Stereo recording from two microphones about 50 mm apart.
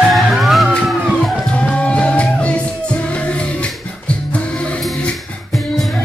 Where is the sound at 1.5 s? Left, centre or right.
Left.